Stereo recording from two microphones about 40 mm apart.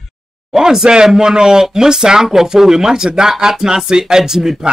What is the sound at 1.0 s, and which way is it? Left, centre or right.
Speech, centre.